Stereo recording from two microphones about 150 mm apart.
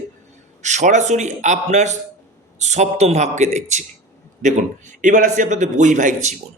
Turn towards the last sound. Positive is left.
turn(degrees=-55)  # may be behind; listen again after turning